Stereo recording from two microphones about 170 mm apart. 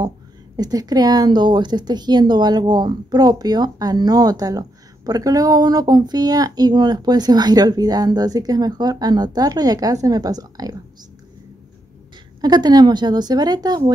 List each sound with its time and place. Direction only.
0.6 s a woman's voice: 20° right (ahead or behind)
12.4 s a woman's voice: 25° right (ahead or behind)